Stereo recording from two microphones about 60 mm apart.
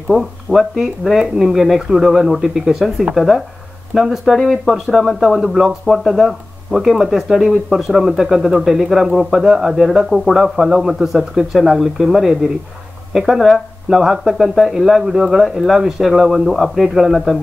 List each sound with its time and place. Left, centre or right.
0.1 s speech: centre